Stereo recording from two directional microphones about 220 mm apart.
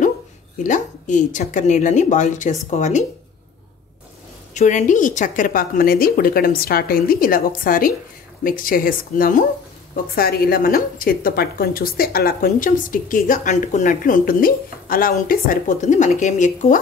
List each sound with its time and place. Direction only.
0.7 s a woman's voice: 35° left (ahead or behind)
4.6 s a woman's voice: 35° left (ahead or behind)